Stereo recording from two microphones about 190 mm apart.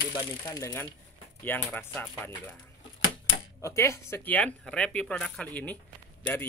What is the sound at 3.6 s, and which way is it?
Speech, 15° left (ahead or behind).